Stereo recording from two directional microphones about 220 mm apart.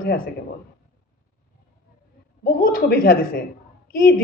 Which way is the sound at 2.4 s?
40° left (ahead or behind).